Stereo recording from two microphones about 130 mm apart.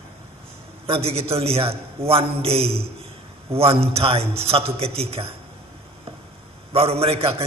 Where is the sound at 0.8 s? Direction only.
50° right (ahead or behind).